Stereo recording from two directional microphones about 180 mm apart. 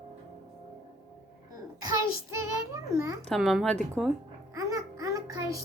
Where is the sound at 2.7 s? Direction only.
15° right (ahead or behind).